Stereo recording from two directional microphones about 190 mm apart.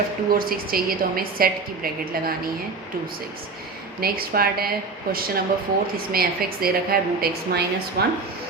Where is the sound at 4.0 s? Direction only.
50° right (ahead or behind).